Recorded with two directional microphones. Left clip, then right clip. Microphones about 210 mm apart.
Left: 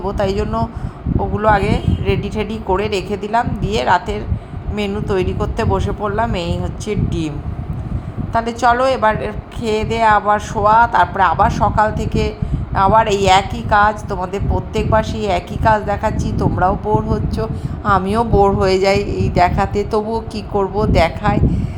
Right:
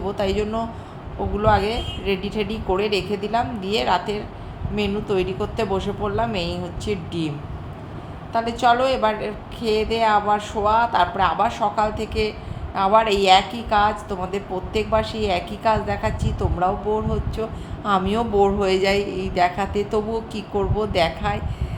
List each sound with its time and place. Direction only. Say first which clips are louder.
0.0 s a woman's voice: left 4 dB; 20° left (ahead or behind)
8.3 s a woman's voice: left 4 dB; 25° left (ahead or behind)